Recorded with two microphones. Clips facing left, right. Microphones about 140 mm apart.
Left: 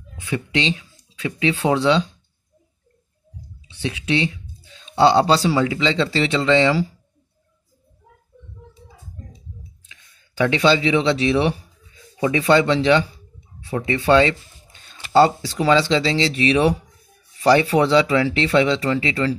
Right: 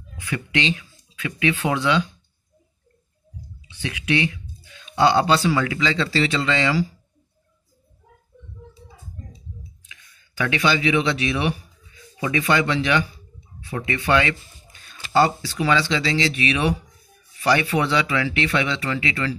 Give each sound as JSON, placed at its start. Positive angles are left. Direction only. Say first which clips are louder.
{"t": 0.2, "sound": "speech", "louder": "left 2 dB", "side_deg": 25}
{"t": 3.8, "sound": "speech", "louder": "left 1 dB", "side_deg": 30}
{"t": 9.8, "sound": "speech", "louder": "right 2 dB", "side_deg": 25}